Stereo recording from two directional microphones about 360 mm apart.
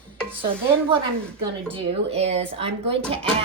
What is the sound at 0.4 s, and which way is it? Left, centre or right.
Speech, centre.